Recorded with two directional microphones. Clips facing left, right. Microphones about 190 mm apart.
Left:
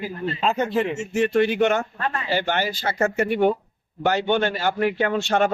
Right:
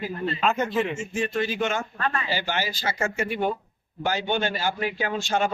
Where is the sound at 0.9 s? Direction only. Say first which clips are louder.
Left 7 dB; 70° left (ahead or behind).